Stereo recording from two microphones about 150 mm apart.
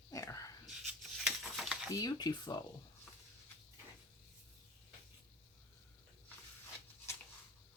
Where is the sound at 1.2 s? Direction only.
Centre (ahead or behind).